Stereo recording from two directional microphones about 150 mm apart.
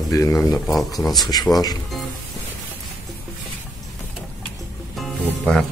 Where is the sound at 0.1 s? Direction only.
25° left (ahead or behind).